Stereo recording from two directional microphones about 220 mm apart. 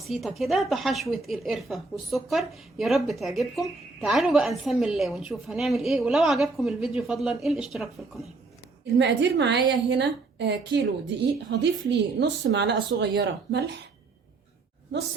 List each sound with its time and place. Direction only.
0.0 s a woman's voice: centre (ahead or behind)
9.0 s speech: 50° right (ahead or behind)